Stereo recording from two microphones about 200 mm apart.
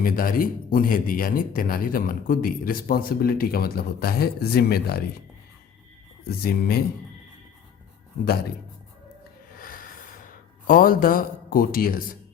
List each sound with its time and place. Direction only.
0.0 s speech: 45° left (ahead or behind)
6.2 s speech: 50° left (ahead or behind)
9.5 s a sound: 45° left (ahead or behind)